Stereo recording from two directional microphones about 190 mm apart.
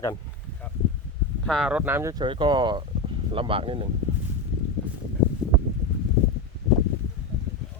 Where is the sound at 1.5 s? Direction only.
Centre (ahead or behind); by 3.8 s 30° right (ahead or behind).